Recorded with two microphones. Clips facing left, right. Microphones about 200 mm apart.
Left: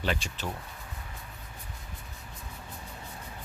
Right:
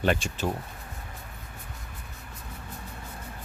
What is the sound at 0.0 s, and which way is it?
Speech, 50° right (ahead or behind).